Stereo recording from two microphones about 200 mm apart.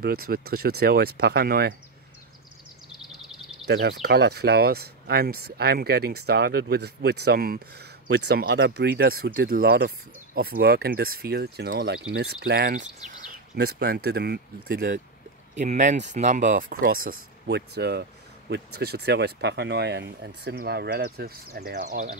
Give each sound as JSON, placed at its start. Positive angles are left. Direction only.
{"t": 0.3, "sound": "speech", "side_deg": -50}
{"t": 3.0, "sound": "a sound", "side_deg": 0}
{"t": 3.6, "sound": "speech", "side_deg": -55}
{"t": 13.6, "sound": "speech", "side_deg": -55}
{"t": 15.5, "sound": "speech", "side_deg": -35}
{"t": 17.1, "sound": "speech", "side_deg": -60}
{"t": 21.8, "sound": "speech", "side_deg": -35}